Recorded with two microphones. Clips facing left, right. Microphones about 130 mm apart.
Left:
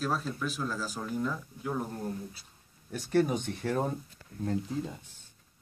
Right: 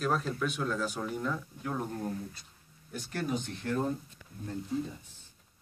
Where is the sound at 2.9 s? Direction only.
65° left (ahead or behind).